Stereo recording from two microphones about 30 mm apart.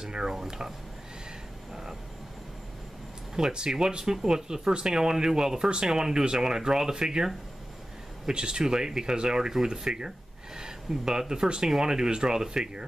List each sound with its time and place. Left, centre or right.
0.0 s speech: right
3.3 s speech: right
8.3 s speech: right
9.5 s speech: centre